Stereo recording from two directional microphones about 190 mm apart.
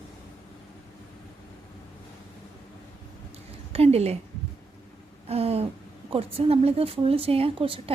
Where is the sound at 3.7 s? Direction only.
30° right (ahead or behind).